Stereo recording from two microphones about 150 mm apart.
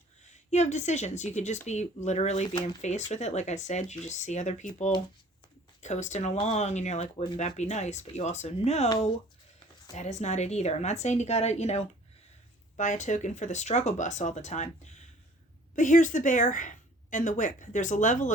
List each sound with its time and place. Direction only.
0.3 s a woman's voice: 50° left (ahead or behind)
5.8 s speech: 50° left (ahead or behind)
9.9 s a woman's voice: 50° left (ahead or behind)